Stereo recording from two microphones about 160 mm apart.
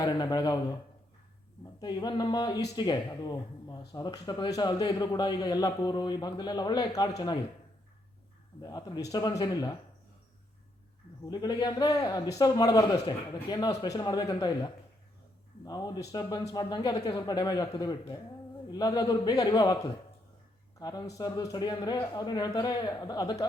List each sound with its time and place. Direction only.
0.0 s speech: 25° left (ahead or behind)
1.8 s speech: 25° left (ahead or behind)
8.6 s speech: 25° left (ahead or behind)
11.3 s speech: 25° left (ahead or behind)